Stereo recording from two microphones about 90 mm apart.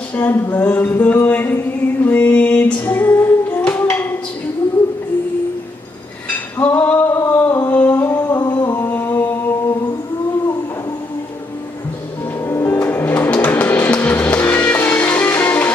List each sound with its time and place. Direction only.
0.1 s a sound: 20° left (ahead or behind)
2.0 s mantra: 20° left (ahead or behind)
2.8 s music: 25° left (ahead or behind)
6.6 s singing: 20° left (ahead or behind)
8.4 s music: 45° left (ahead or behind)
8.7 s chant: 25° left (ahead or behind)
12.4 s music: 30° left (ahead or behind)